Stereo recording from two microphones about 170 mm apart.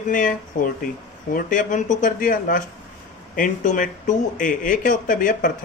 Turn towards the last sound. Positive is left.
turn(degrees=50)  # may be behind; listen again after turning